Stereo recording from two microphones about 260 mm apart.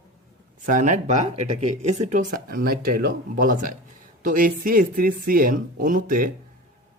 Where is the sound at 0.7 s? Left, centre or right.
Right.